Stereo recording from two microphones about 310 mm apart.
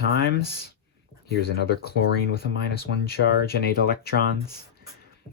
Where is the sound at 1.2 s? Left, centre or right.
Left.